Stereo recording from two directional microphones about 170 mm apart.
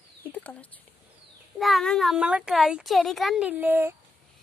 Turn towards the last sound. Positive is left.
turn(degrees=-10)  # may be behind; listen again after turning